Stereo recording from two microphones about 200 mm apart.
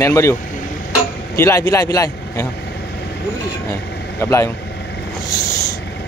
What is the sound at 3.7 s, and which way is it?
Speech, 15° left (ahead or behind).